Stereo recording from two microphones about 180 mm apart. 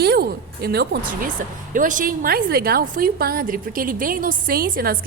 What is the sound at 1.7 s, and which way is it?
A woman's voice, 45° right (ahead or behind).